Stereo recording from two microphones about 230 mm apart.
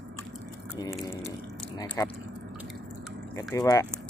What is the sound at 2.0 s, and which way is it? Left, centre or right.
Speech, centre.